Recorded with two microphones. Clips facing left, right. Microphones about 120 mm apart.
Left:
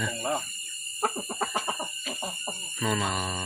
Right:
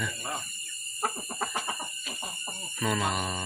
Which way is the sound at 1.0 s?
20° left (ahead or behind).